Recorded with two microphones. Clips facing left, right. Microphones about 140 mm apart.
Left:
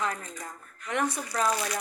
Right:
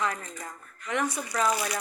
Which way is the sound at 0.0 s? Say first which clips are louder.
Right 1 dB; 35° left (ahead or behind).